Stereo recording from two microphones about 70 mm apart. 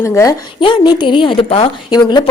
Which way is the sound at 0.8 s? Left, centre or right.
Left.